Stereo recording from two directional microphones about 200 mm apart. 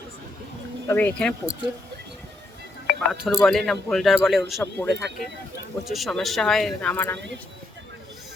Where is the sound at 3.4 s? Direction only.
Centre (ahead or behind).